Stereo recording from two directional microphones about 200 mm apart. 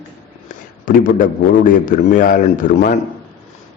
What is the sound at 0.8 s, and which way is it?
A man's voice, 45° left (ahead or behind).